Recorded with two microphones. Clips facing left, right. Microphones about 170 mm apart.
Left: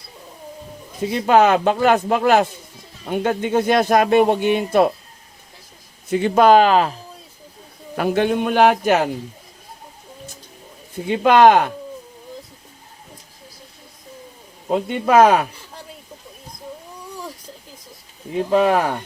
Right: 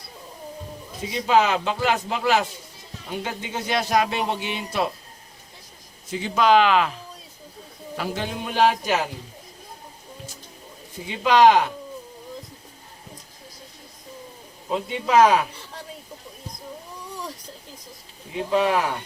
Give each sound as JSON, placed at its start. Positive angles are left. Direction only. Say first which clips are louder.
{"t": 1.0, "sound": "speech", "louder": "left 6 dB", "side_deg": 55}
{"t": 6.1, "sound": "speech", "louder": "left 6 dB", "side_deg": 55}
{"t": 7.9, "sound": "a man's voice", "louder": "left 11 dB", "side_deg": 60}
{"t": 10.9, "sound": "a man's voice", "louder": "left 5 dB", "side_deg": 55}
{"t": 14.7, "sound": "speech", "louder": "left 5 dB", "side_deg": 55}
{"t": 18.5, "sound": "speech", "louder": "left 4 dB", "side_deg": 50}